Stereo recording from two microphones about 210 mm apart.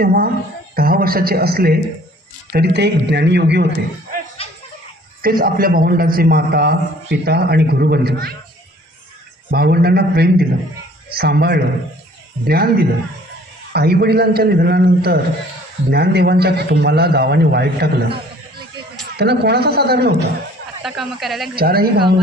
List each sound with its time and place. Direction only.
0.0 s a man's voice: 45° right (ahead or behind)
4.4 s a sound: 30° left (ahead or behind)
5.2 s a man's voice: 45° right (ahead or behind)
9.5 s a man's voice: 50° right (ahead or behind)
19.1 s a man's voice: 50° right (ahead or behind)
20.8 s speech: centre (ahead or behind)
21.5 s a man's voice: 45° right (ahead or behind)